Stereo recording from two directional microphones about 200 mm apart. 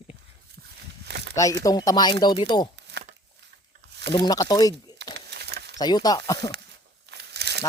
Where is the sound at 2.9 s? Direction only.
60° right (ahead or behind).